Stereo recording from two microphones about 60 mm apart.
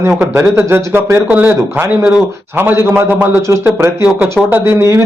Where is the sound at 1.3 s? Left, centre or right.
Right.